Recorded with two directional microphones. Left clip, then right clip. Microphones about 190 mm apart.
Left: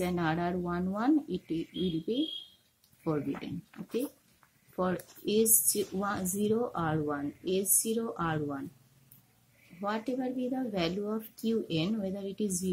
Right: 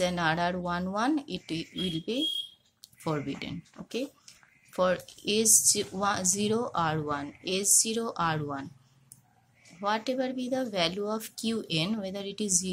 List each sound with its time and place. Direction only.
0.0 s speech: 10° right (ahead or behind)
4.7 s speech: 10° right (ahead or behind)
9.8 s speech: 5° right (ahead or behind)